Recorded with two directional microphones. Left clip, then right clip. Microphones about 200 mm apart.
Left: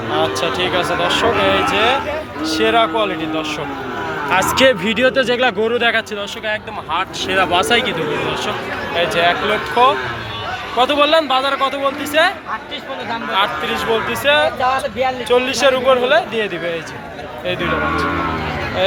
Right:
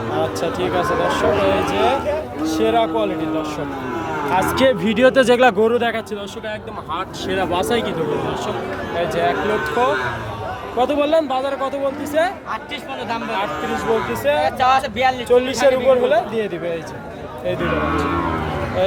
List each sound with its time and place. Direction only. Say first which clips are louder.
0.2 s a man's voice: left 4 dB; 5° right (ahead or behind)
4.3 s speech: left 3 dB; 10° right (ahead or behind)
4.8 s speech: right 1 dB; 25° right (ahead or behind)
6.5 s a man's voice: left 6 dB; centre (ahead or behind)
9.0 s a man's voice: left 4 dB; 5° right (ahead or behind)
13.3 s a man's voice: left 7 dB; 5° right (ahead or behind)